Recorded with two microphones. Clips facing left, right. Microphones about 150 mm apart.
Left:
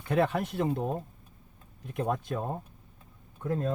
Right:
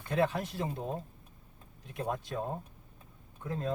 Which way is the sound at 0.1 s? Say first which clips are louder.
Left 3 dB; 60° left (ahead or behind).